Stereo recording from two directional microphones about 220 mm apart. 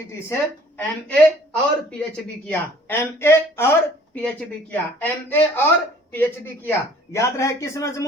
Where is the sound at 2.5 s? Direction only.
10° left (ahead or behind).